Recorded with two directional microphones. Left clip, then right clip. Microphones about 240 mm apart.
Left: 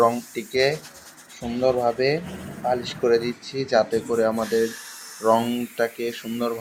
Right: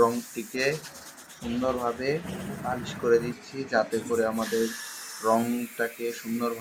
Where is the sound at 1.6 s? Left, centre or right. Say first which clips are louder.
Left 8 dB; left.